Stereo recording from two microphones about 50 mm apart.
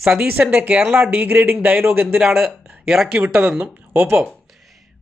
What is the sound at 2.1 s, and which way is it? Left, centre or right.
Speech, centre.